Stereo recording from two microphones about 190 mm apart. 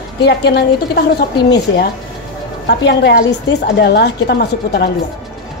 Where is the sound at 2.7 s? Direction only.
65° left (ahead or behind).